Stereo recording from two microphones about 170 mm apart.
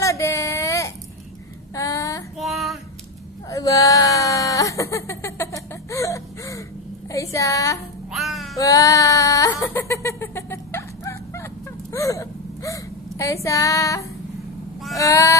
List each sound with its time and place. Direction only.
0.0 s a sound: 20° left (ahead or behind)
1.8 s child singing: 20° left (ahead or behind)
2.3 s female singing: centre (ahead or behind)
3.4 s baby cry: 20° left (ahead or behind)
7.1 s a woman's voice: 20° left (ahead or behind)
8.1 s music: centre (ahead or behind)
8.5 s a sound: 20° left (ahead or behind)
11.9 s whimper: 20° left (ahead or behind)
15.0 s vehicle: 20° left (ahead or behind)